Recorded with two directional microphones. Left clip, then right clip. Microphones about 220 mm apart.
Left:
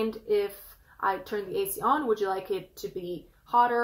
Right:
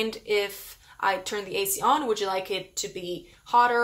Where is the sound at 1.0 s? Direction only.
20° right (ahead or behind).